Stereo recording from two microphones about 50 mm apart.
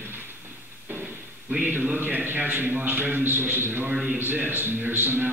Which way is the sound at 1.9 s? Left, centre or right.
Right.